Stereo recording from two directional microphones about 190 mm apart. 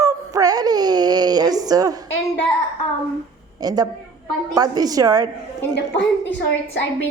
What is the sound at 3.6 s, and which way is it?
A woman's voice, 20° right (ahead or behind).